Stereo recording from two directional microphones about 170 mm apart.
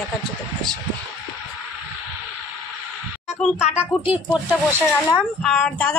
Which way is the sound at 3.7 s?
10° right (ahead or behind).